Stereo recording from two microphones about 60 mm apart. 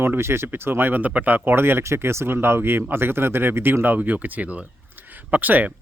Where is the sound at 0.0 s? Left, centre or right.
Right.